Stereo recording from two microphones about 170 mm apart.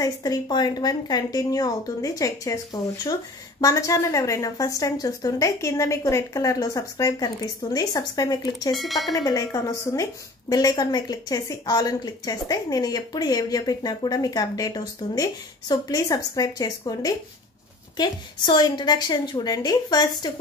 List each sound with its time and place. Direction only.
0.0 s speech: 20° left (ahead or behind)
8.7 s speech: centre (ahead or behind)
9.1 s speech: 20° left (ahead or behind)